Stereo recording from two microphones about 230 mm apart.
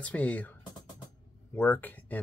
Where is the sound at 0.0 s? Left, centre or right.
Centre.